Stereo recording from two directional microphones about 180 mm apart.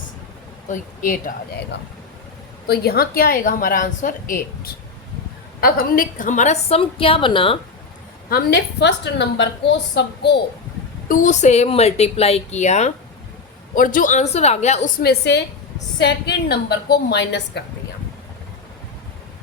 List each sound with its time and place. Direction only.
0.7 s a woman's voice: 50° left (ahead or behind)
2.6 s a woman's voice: 60° left (ahead or behind); by 7.6 s 30° left (ahead or behind)
8.3 s a woman's voice: 60° left (ahead or behind)
11.1 s a woman's voice: 45° left (ahead or behind); by 17.6 s 70° left (ahead or behind)